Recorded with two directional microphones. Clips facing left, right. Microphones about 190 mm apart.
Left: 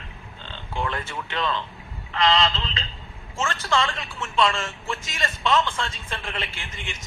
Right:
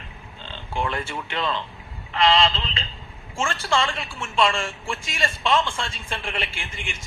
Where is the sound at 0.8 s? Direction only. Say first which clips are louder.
Right 2 dB; 30° right (ahead or behind).